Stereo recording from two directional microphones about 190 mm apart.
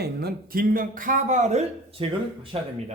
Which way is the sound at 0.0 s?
55° right (ahead or behind).